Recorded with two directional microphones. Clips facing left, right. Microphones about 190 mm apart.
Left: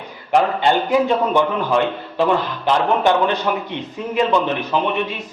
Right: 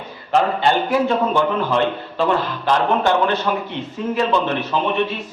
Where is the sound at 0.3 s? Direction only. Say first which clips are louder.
Left 1 dB; 15° left (ahead or behind).